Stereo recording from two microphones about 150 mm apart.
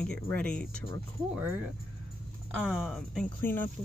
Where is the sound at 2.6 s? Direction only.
5° right (ahead or behind).